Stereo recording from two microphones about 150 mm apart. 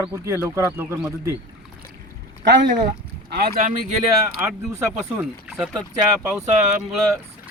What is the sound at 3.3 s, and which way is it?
Speech, 90° right.